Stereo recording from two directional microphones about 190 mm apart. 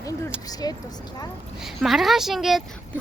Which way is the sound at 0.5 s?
20° left (ahead or behind).